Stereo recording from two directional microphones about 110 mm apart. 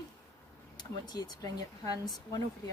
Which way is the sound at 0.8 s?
40° left (ahead or behind).